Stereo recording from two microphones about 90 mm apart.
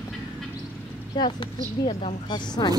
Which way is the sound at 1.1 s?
65° left (ahead or behind).